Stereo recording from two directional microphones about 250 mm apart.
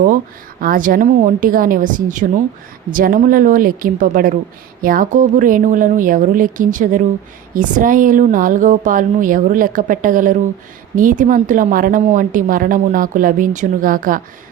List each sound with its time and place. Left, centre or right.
0.6 s a woman's voice: right